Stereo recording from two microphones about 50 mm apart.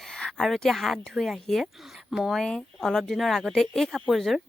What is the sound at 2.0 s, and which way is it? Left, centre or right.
Speech, centre.